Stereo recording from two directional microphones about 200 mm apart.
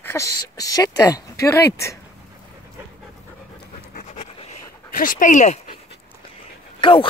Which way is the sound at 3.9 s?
35° left (ahead or behind).